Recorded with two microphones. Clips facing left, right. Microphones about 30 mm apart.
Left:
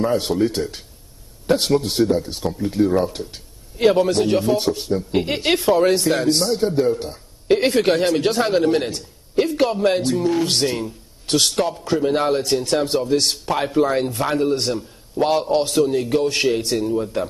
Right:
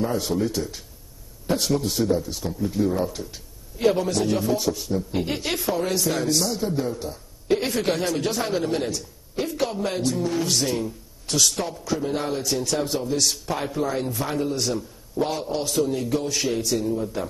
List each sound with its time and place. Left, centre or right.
0.0 s a man's voice: left
7.0 s a sound: left
7.5 s a man's voice: left